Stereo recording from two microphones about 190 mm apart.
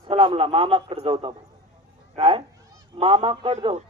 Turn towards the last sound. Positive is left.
turn(degrees=-30)  # may be behind; listen again after turning